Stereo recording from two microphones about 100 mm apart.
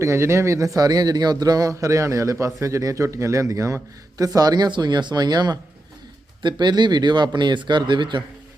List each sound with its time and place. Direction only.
0.0 s speech: 30° right (ahead or behind)
0.8 s a man's voice: 40° right (ahead or behind)